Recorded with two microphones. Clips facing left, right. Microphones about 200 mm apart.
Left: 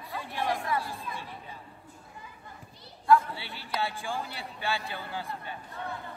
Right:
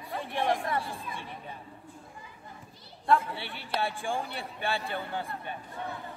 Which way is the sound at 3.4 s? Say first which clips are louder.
Right 2 dB; 55° right (ahead or behind).